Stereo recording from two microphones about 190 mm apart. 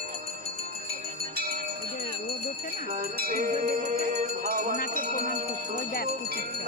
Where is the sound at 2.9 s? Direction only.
50° right (ahead or behind).